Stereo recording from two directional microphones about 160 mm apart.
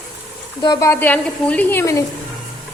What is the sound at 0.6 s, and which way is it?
Speech, 25° left (ahead or behind).